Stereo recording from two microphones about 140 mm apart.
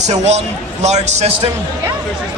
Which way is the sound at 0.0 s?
55° right (ahead or behind).